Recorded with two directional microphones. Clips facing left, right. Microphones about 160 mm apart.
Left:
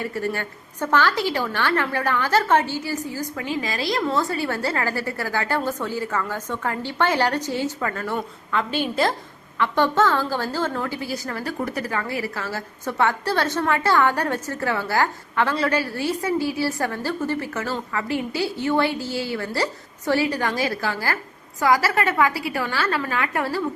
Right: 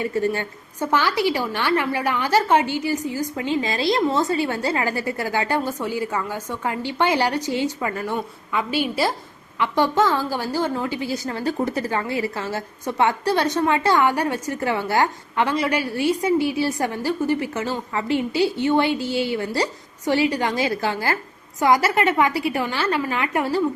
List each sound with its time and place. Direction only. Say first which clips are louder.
0.0 s a woman's voice: right 4 dB; 20° right (ahead or behind)